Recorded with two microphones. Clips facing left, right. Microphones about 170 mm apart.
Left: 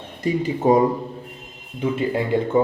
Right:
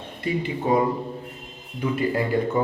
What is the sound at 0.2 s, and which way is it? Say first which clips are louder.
Speech: left 5 dB; 40° left (ahead or behind).